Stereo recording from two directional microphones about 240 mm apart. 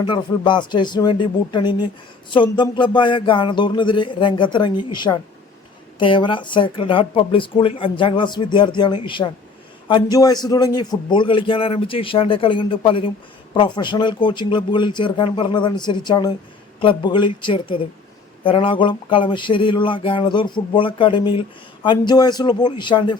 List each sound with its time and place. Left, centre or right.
0.0 s a man's voice: centre